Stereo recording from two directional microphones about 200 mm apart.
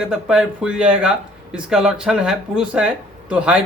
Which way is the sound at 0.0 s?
5° right (ahead or behind).